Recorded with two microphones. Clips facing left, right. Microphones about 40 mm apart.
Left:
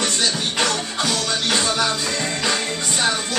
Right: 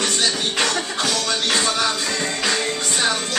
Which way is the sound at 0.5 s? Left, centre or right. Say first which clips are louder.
Even; centre.